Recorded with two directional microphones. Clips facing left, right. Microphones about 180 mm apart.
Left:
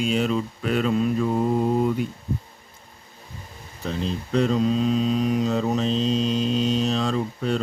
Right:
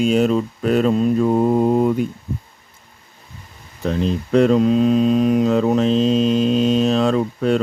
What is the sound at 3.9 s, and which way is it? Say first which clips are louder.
Speech: right 7 dB; 60° right (ahead or behind).